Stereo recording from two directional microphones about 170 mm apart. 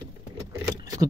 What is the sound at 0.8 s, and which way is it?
Vehicle, 20° right (ahead or behind).